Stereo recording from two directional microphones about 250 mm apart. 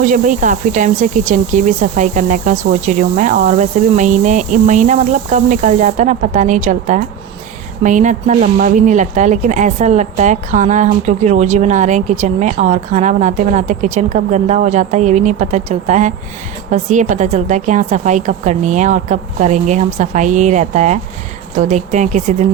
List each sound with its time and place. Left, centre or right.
0.0 s speech: right